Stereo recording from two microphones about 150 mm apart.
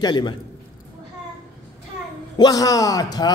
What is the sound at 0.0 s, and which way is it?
Speech, 30° left (ahead or behind).